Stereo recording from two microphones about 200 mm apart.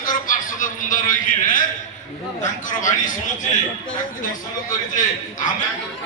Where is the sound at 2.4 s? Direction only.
40° left (ahead or behind).